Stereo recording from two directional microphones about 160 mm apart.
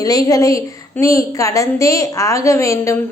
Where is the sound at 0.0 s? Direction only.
20° left (ahead or behind).